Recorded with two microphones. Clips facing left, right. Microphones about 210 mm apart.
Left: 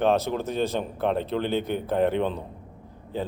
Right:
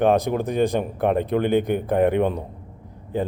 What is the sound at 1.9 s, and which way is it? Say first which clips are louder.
Speech: right 4 dB; 55° right (ahead or behind).